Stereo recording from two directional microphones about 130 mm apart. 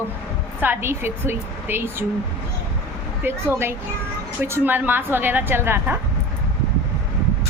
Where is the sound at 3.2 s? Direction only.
20° right (ahead or behind).